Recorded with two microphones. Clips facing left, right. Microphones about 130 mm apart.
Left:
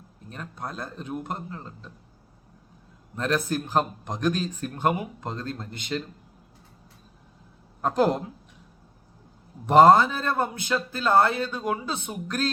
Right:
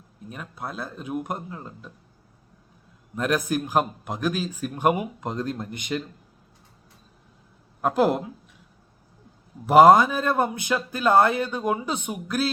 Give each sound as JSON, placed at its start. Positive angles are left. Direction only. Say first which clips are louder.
{"t": 0.3, "sound": "speech", "louder": "right 1 dB", "side_deg": -5}
{"t": 3.2, "sound": "speech", "louder": "right 2 dB", "side_deg": -15}
{"t": 7.8, "sound": "a woman's voice", "louder": "right 1 dB", "side_deg": -5}
{"t": 9.6, "sound": "speech", "louder": "right 2 dB", "side_deg": -10}